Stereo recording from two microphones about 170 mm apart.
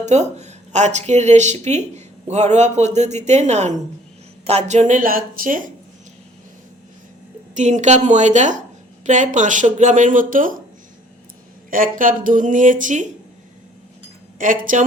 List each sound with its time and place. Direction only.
0.0 s speech: 40° right (ahead or behind)
7.5 s speech: 45° right (ahead or behind)
11.7 s speech: 55° right (ahead or behind)
14.3 s speech: 50° right (ahead or behind)